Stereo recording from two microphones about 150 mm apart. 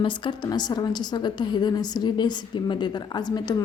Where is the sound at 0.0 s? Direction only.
35° left (ahead or behind).